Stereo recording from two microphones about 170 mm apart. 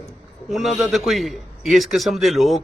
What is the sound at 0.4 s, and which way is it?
A man's voice, centre (ahead or behind).